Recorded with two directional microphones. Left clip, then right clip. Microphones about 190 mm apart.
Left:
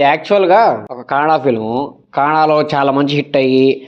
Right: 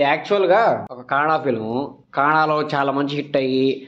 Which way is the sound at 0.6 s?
25° left (ahead or behind).